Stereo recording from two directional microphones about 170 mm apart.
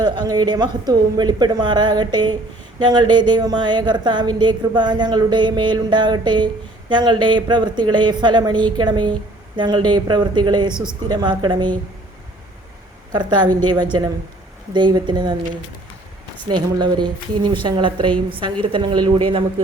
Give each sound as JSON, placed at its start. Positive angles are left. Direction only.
{"t": 0.0, "sound": "a woman's voice", "side_deg": -25}
{"t": 13.1, "sound": "a woman's voice", "side_deg": -25}
{"t": 16.6, "sound": "a woman's voice", "side_deg": -25}